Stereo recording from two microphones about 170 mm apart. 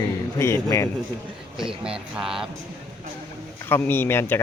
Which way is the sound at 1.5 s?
5° right (ahead or behind).